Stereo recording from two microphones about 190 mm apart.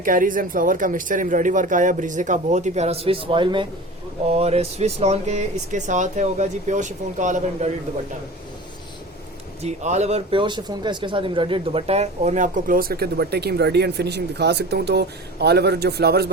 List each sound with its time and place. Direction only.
0.0 s speech: 45° right (ahead or behind)
9.6 s speech: 35° right (ahead or behind); by 16.3 s 55° right (ahead or behind)